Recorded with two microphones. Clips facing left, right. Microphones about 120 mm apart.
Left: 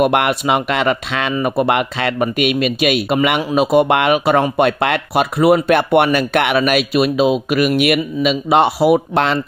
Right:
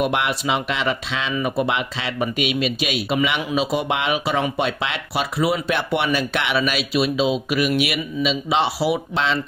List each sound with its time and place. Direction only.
0.0 s speech: 60° left (ahead or behind)